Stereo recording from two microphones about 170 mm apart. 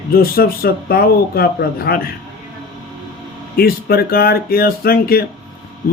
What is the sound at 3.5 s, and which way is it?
A man's voice, 65° left (ahead or behind).